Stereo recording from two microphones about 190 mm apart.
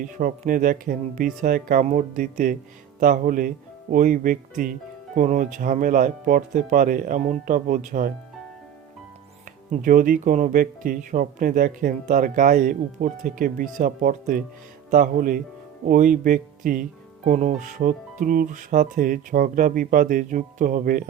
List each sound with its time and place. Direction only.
0.1 s speech: 45° right (ahead or behind)
9.7 s speech: 45° right (ahead or behind)